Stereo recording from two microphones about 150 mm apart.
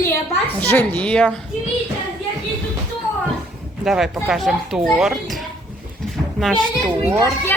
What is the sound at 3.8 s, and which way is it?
Speech, centre (ahead or behind).